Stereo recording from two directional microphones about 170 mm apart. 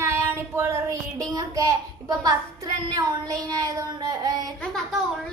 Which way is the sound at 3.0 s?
20° right (ahead or behind).